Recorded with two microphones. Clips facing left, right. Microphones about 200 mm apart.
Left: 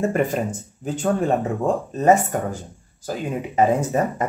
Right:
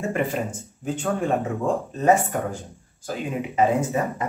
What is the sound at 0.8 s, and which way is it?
Speech, 35° left (ahead or behind).